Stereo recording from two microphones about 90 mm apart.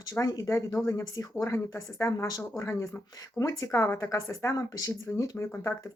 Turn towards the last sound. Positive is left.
turn(degrees=20)  # may be behind; listen again after turning